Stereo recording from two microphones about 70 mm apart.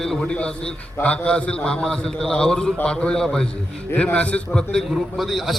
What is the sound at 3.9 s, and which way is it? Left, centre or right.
Speech, centre.